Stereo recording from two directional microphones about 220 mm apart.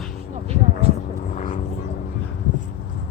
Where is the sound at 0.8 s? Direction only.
25° right (ahead or behind).